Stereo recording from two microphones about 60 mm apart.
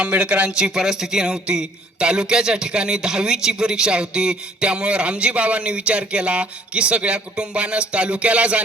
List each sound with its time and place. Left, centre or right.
0.0 s speech: right
0.7 s a man's voice: centre